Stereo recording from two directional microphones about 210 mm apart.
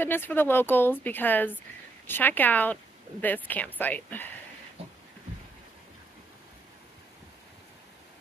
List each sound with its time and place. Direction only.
0.0 s speech: 10° left (ahead or behind)
4.8 s beatboxing: 30° right (ahead or behind)